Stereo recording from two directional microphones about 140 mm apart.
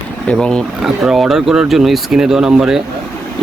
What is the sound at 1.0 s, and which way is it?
Speech, 5° right (ahead or behind).